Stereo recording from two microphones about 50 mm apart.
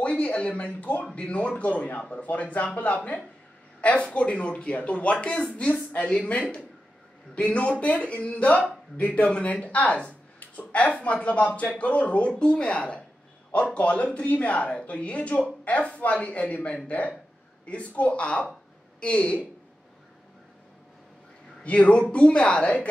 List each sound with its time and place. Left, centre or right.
0.0 s speech: left
21.6 s speech: left